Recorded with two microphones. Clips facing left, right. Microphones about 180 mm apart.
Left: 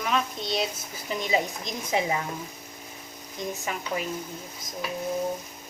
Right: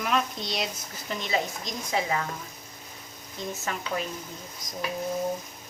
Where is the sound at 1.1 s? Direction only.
15° left (ahead or behind).